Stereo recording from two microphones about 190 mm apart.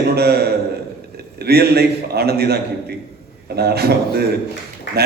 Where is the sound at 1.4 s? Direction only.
55° right (ahead or behind).